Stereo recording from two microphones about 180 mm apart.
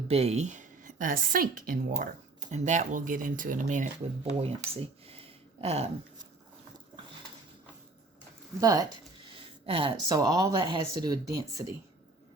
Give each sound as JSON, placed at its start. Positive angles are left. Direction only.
{"t": 0.1, "sound": "a woman's voice", "side_deg": -35}
{"t": 2.5, "sound": "speech", "side_deg": -40}
{"t": 4.4, "sound": "a sound", "side_deg": -35}
{"t": 8.6, "sound": "speech", "side_deg": -20}